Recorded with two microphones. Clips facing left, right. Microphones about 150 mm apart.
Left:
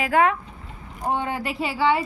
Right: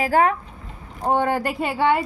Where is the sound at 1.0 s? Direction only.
55° right (ahead or behind).